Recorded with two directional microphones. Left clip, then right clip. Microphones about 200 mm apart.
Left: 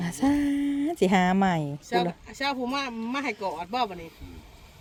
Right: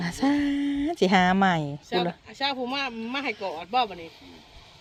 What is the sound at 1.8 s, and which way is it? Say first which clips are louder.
Speech: left 1 dB; 70° left (ahead or behind).